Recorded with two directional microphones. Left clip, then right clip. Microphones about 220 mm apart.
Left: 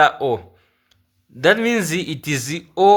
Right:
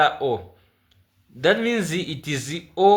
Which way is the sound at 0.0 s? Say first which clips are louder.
Left 4 dB; 30° left (ahead or behind).